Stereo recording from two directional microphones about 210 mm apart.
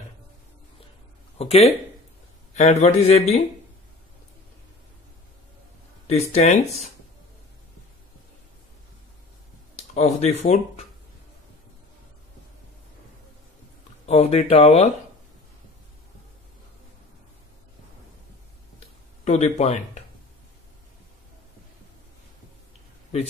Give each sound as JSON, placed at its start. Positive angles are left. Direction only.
{"t": 1.4, "sound": "speech", "side_deg": 30}
{"t": 6.0, "sound": "speech", "side_deg": 30}
{"t": 9.8, "sound": "speech", "side_deg": 30}
{"t": 14.0, "sound": "speech", "side_deg": 30}
{"t": 19.2, "sound": "speech", "side_deg": 30}